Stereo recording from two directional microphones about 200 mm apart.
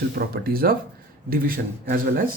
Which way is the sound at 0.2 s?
50° right (ahead or behind).